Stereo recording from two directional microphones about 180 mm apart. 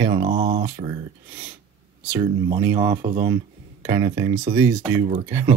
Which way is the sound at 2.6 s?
15° right (ahead or behind).